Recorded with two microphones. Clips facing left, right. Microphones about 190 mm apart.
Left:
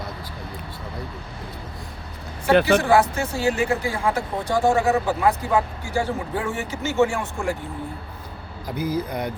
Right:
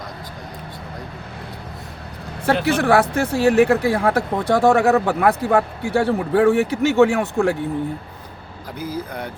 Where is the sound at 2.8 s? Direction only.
65° right (ahead or behind).